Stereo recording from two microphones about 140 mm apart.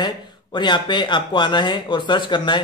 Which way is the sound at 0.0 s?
30° left (ahead or behind).